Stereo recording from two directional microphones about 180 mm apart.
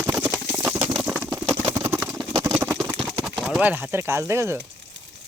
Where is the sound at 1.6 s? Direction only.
15° right (ahead or behind).